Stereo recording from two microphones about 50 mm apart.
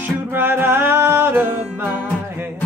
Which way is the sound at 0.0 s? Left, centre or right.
Right.